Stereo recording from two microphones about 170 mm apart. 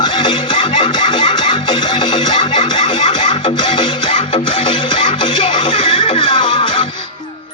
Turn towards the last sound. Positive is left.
turn(degrees=30)  # may be behind; listen again after turning